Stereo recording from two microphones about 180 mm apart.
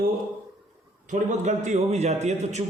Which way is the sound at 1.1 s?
40° right (ahead or behind).